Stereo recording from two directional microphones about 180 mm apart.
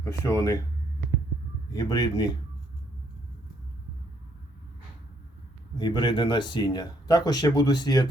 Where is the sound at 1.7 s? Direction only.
20° left (ahead or behind).